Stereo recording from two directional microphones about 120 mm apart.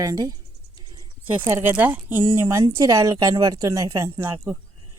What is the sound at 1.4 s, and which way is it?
Speech, 20° right (ahead or behind).